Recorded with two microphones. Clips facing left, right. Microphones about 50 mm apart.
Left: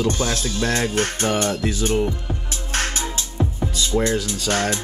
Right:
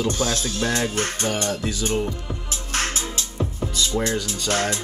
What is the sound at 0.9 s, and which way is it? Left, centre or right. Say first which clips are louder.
Music: left 3 dB; left.